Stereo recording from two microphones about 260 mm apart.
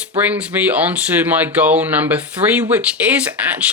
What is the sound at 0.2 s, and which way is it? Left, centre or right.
Speech, centre.